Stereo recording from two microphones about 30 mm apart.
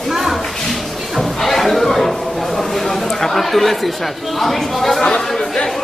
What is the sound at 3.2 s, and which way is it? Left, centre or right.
Speech, centre.